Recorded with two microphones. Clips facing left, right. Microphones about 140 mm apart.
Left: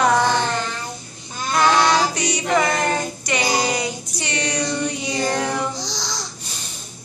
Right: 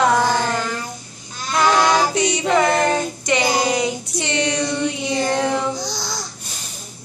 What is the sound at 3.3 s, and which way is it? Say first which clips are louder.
Child singing: right 5 dB; 20° right (ahead or behind).